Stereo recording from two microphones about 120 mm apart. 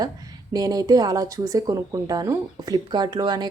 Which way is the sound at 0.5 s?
30° right (ahead or behind).